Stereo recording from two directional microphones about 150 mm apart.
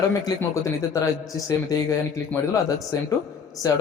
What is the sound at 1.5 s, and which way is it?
A man's voice, 20° left (ahead or behind).